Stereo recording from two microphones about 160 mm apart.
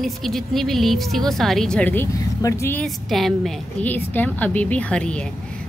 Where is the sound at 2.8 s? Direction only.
Centre (ahead or behind).